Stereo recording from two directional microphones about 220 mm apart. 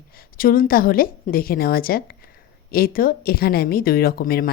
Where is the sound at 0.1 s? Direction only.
40° left (ahead or behind).